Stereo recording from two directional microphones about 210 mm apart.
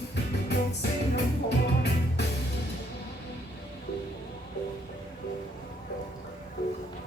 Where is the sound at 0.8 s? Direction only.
50° left (ahead or behind).